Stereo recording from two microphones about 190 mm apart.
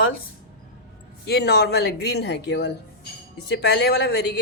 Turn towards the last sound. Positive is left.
turn(degrees=60)  # may be behind; listen again after turning